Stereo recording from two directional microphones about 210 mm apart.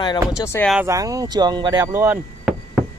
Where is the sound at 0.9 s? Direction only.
15° right (ahead or behind).